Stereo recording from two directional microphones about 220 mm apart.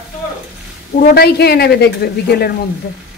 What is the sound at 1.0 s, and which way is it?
Speech, 45° left (ahead or behind).